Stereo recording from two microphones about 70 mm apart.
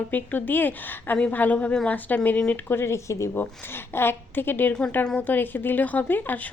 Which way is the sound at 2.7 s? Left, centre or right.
Left.